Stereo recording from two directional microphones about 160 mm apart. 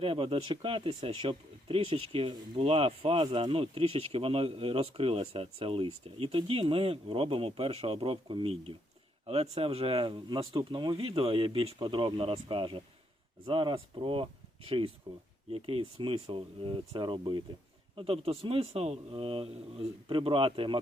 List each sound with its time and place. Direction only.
0.0 s speech: 35° right (ahead or behind)